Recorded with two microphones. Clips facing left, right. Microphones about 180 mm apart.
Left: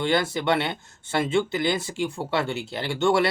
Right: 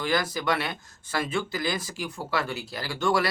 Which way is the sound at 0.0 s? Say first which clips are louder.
Left 3 dB; 25° left (ahead or behind).